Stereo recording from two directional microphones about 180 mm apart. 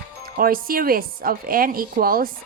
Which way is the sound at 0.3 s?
55° right (ahead or behind).